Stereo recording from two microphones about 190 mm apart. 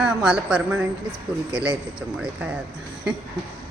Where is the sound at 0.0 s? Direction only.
5° right (ahead or behind).